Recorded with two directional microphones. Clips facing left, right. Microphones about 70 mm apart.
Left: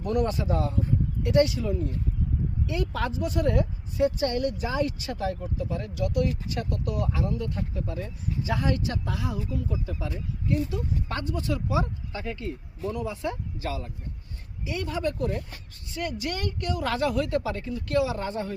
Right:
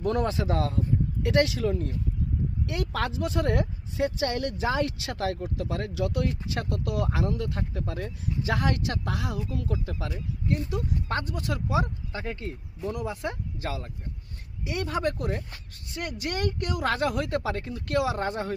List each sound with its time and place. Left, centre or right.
0.0 s speech: right
2.6 s speech: right
10.5 s speech: right
14.6 s speech: right